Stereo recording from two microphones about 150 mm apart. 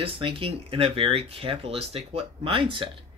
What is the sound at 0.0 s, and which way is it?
Speech, 35° right (ahead or behind).